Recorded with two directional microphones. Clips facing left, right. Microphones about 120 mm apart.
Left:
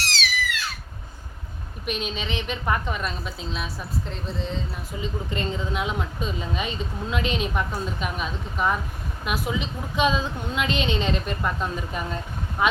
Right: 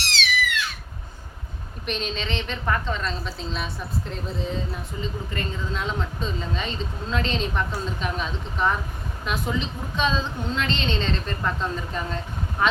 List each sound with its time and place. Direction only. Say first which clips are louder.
0.0 s cat: right 2 dB; 35° left (ahead or behind)
1.9 s speech: even; 5° left (ahead or behind)
4.9 s speech: left 3 dB; 20° left (ahead or behind)